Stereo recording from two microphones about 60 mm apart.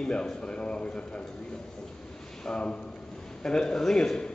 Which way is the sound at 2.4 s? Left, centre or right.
Centre.